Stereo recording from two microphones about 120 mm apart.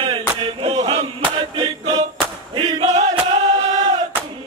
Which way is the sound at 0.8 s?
55° right (ahead or behind).